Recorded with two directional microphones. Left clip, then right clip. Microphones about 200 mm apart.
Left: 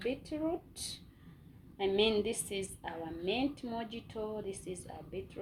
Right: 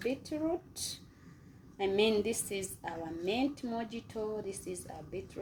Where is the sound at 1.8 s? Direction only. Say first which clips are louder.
Right 1 dB; 20° right (ahead or behind).